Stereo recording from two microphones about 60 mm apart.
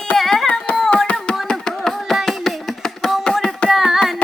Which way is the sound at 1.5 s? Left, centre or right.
Centre.